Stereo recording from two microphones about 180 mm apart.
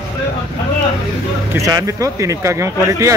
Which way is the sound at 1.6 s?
20° right (ahead or behind).